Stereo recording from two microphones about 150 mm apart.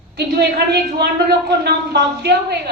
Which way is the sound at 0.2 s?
90° right.